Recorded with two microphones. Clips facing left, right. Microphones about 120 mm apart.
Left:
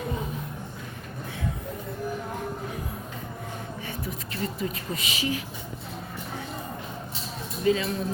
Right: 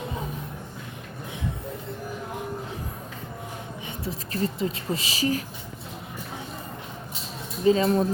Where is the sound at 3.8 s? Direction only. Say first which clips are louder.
Right 1 dB; 30° right (ahead or behind).